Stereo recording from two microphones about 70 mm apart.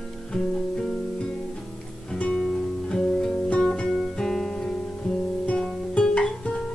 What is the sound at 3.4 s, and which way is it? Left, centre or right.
Guitar, centre.